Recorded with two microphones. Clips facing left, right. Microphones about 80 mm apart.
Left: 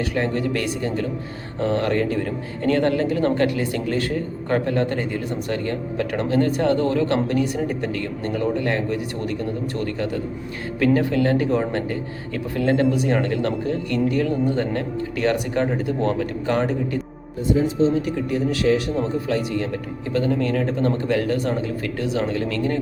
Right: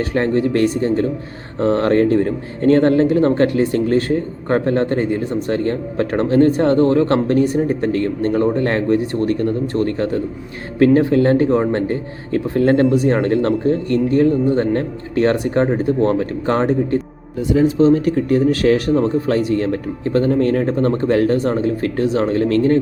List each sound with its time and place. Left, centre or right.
0.1 s speech: right
9.7 s speech: right
17.5 s speech: right